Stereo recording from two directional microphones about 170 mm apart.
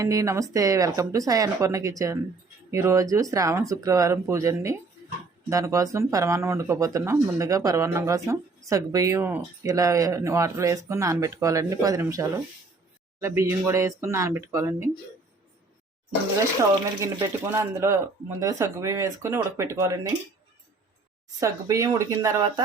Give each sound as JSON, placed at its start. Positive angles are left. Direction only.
{"t": 0.0, "sound": "speech", "side_deg": -20}
{"t": 17.0, "sound": "speech", "side_deg": -15}
{"t": 21.4, "sound": "speech", "side_deg": -20}